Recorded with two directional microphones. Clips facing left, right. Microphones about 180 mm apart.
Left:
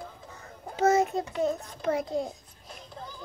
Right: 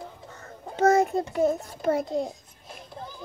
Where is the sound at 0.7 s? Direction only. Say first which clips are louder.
Right 3 dB; 5° left (ahead or behind).